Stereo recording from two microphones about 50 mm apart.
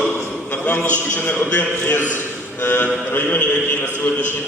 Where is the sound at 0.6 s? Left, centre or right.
Left.